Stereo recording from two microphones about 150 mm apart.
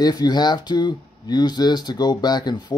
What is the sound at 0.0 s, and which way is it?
Speech, 25° left (ahead or behind).